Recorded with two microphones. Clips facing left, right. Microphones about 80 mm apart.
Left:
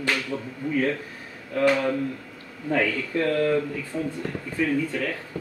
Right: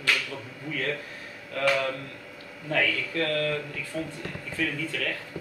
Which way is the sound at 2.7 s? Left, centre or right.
Centre.